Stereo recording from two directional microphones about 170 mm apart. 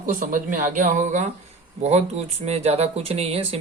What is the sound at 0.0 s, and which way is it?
Speech, 50° right (ahead or behind).